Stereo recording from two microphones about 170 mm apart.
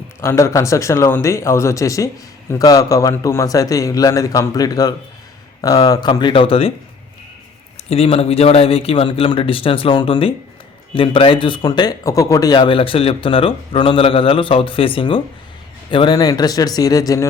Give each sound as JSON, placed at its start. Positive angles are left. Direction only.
{"t": 0.2, "sound": "a man's voice", "side_deg": 15}
{"t": 7.9, "sound": "a man's voice", "side_deg": 35}